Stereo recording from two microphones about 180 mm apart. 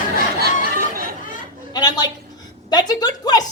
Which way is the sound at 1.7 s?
25° left (ahead or behind).